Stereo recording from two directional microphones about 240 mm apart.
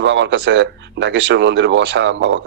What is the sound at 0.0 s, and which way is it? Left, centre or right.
Speech, right.